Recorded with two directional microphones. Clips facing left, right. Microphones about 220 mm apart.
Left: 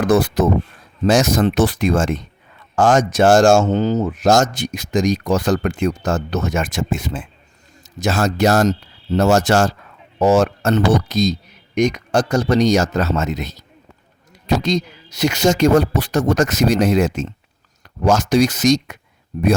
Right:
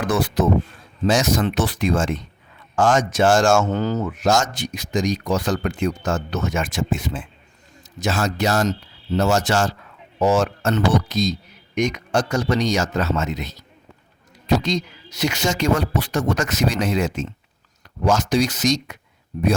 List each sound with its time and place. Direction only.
0.1 s speech: 40° left (ahead or behind); by 4.1 s 20° left (ahead or behind)
4.2 s speech: 40° left (ahead or behind)